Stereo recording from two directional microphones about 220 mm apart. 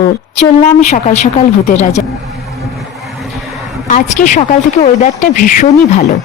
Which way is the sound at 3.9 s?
35° left (ahead or behind).